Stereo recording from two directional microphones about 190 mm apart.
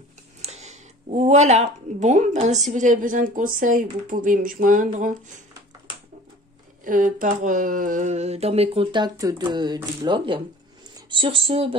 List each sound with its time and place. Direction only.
0.4 s speech: 35° right (ahead or behind)
6.8 s speech: 45° right (ahead or behind)